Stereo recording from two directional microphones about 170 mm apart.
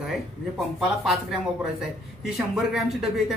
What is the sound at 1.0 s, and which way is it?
A man's voice, centre (ahead or behind).